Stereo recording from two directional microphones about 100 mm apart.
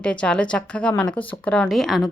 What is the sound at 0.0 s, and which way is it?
A woman's voice, 10° left (ahead or behind).